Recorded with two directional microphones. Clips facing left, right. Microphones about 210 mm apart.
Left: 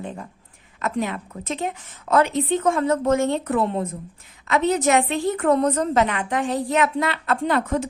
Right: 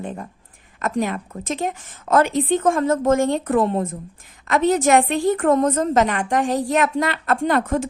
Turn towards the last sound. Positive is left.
turn(degrees=-50)  # may be behind; listen again after turning